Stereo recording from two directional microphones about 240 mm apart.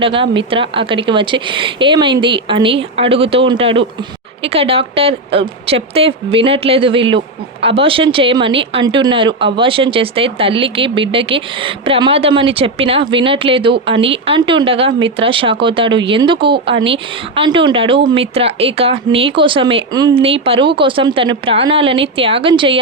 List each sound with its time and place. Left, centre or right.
0.0 s speech: right